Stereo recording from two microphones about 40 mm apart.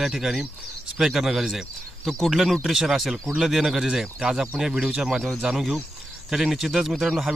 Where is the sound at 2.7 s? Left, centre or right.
Centre.